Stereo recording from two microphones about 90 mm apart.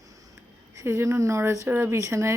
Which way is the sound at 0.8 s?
30° right (ahead or behind).